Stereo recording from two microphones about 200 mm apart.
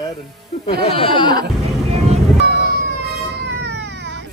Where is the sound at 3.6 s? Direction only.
60° right (ahead or behind).